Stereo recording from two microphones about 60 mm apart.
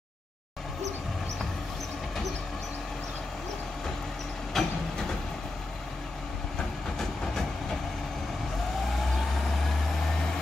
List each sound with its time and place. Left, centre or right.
4.6 s train: centre